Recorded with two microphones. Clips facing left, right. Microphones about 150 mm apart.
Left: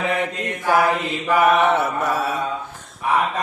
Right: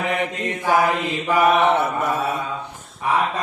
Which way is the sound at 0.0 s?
15° right (ahead or behind).